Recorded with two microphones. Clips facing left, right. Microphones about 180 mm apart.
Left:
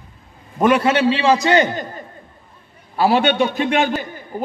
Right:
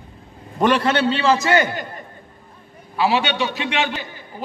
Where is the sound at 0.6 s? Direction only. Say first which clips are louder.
Left 2 dB; 10° left (ahead or behind).